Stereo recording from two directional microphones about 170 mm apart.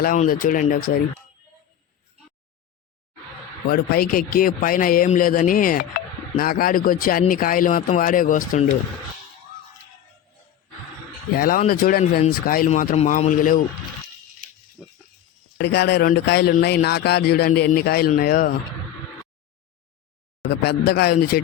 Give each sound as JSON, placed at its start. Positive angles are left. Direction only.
{"t": 0.2, "sound": "speech", "side_deg": 55}
{"t": 3.7, "sound": "speech", "side_deg": 60}
{"t": 11.3, "sound": "speech", "side_deg": 55}
{"t": 14.8, "sound": "a sound", "side_deg": -5}
{"t": 15.5, "sound": "speech", "side_deg": 80}
{"t": 20.5, "sound": "speech", "side_deg": 75}